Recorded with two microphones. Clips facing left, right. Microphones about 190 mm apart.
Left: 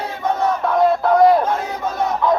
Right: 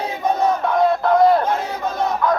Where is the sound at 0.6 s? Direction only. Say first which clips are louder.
Left 3 dB; 5° left (ahead or behind).